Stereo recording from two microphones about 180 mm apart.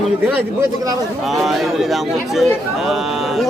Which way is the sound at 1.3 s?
Centre (ahead or behind).